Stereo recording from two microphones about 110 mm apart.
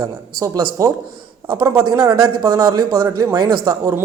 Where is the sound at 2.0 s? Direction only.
35° right (ahead or behind).